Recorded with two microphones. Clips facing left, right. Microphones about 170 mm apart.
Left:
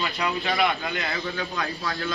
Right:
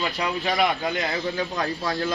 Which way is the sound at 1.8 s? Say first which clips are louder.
Right 4 dB; 20° right (ahead or behind).